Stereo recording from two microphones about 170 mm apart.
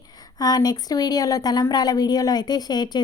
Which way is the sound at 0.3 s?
20° left (ahead or behind).